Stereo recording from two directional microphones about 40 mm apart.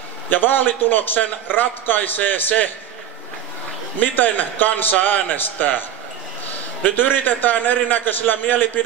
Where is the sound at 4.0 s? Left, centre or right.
Left.